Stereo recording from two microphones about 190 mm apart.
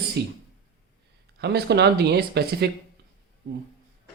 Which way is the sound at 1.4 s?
60° right (ahead or behind).